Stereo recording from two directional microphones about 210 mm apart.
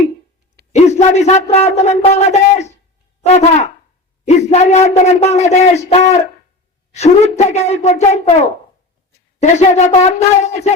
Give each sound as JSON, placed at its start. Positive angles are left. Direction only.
{"t": 0.7, "sound": "speech", "side_deg": 30}
{"t": 9.4, "sound": "speech", "side_deg": 35}